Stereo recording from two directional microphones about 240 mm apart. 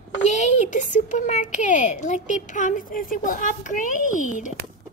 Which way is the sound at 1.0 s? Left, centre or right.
Left.